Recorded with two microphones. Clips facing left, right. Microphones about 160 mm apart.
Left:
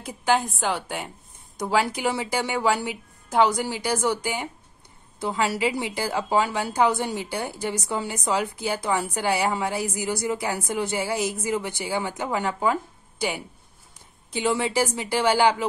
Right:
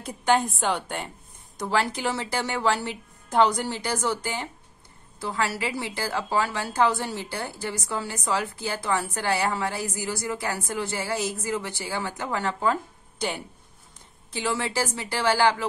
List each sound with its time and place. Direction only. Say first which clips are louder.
0.0 s a woman's voice: even; centre (ahead or behind)